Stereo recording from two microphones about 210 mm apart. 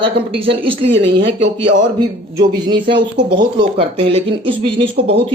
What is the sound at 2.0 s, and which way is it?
Speech, 20° right (ahead or behind).